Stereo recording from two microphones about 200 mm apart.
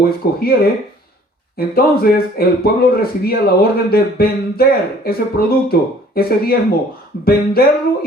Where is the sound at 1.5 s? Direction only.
50° left (ahead or behind).